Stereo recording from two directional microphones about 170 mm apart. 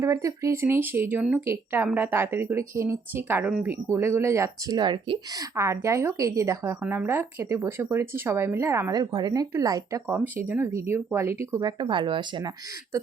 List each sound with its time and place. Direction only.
0.0 s speech: 20° right (ahead or behind)